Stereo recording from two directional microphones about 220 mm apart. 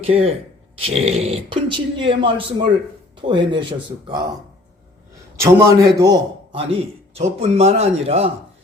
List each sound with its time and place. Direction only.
0.0 s speech: 25° right (ahead or behind)
5.4 s a man's voice: 15° right (ahead or behind)